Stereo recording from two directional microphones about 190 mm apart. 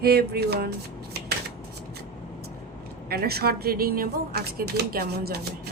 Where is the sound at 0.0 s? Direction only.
55° right (ahead or behind).